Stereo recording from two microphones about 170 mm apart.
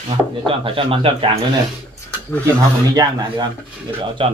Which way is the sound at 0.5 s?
30° right (ahead or behind).